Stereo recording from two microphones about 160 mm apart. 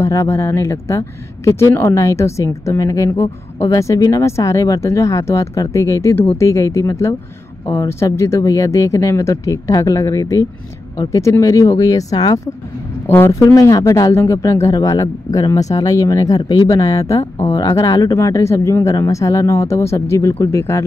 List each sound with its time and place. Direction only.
0.0 s speech: 15° left (ahead or behind)